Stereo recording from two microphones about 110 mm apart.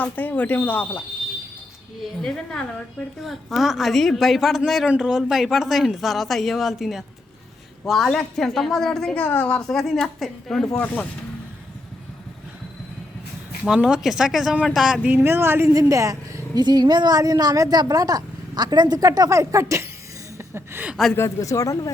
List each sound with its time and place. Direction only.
0.0 s speech: 15° left (ahead or behind)
2.2 s speech: 5° left (ahead or behind)
9.2 s speech: 15° left (ahead or behind)
13.7 s speech: 5° right (ahead or behind)
15.0 s a woman's voice: 15° right (ahead or behind)
20.8 s speech: 5° right (ahead or behind)
21.2 s speech: 30° left (ahead or behind)